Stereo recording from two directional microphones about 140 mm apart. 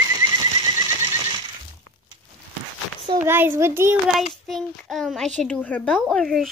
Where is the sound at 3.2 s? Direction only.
15° right (ahead or behind).